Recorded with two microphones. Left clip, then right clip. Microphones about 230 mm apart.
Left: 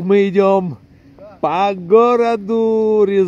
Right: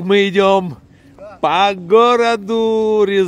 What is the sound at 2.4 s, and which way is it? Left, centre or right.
Speech, right.